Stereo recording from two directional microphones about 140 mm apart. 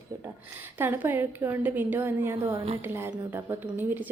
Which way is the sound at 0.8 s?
15° right (ahead or behind).